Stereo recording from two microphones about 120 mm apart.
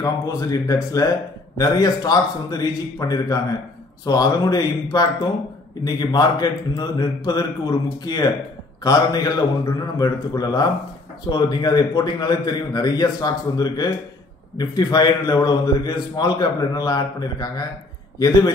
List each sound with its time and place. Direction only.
0.0 s a man's voice: 30° left (ahead or behind)